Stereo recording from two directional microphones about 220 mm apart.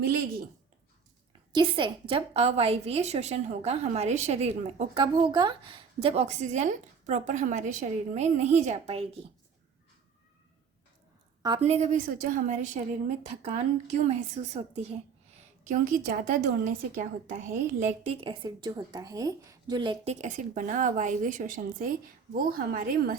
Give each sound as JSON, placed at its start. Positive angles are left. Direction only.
{"t": 1.3, "sound": "a woman's voice", "side_deg": -20}
{"t": 11.4, "sound": "a woman's voice", "side_deg": -25}
{"t": 20.2, "sound": "a woman's voice", "side_deg": -35}